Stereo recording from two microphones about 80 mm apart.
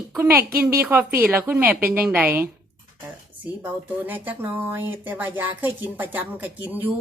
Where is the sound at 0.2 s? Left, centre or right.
Right.